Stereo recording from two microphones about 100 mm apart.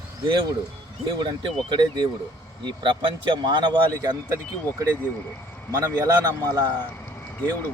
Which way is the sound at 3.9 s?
35° right (ahead or behind).